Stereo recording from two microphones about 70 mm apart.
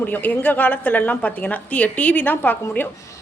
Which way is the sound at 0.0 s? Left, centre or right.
Left.